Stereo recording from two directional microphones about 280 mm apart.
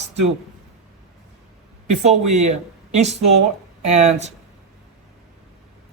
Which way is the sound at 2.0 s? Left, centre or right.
Right.